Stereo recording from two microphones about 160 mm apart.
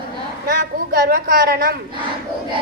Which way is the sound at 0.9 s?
65° right (ahead or behind).